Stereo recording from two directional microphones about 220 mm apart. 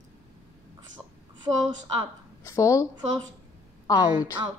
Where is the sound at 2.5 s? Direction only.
15° left (ahead or behind).